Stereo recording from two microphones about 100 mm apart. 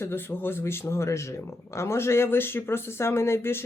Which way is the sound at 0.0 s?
25° left (ahead or behind).